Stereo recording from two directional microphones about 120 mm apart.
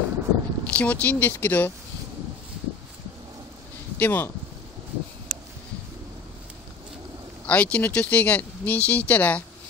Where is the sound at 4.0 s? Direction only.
20° left (ahead or behind).